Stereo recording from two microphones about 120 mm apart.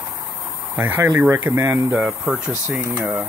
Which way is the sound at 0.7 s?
15° right (ahead or behind).